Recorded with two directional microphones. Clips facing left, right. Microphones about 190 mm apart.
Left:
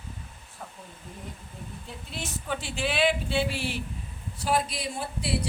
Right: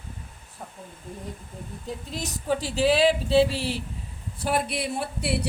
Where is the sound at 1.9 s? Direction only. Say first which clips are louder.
Right 6 dB; 40° right (ahead or behind).